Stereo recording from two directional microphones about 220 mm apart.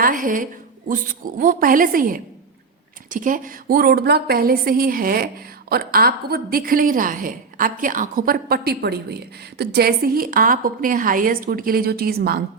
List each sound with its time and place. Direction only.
0.0 s a woman's voice: 40° right (ahead or behind)